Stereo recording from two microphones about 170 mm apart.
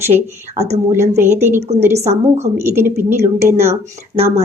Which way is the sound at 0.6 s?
40° right (ahead or behind).